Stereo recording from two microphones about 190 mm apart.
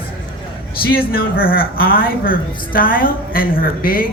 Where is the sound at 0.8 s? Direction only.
50° left (ahead or behind).